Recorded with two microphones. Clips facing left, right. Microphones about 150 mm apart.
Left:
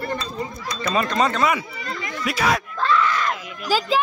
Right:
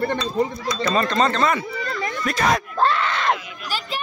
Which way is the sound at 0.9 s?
10° left (ahead or behind).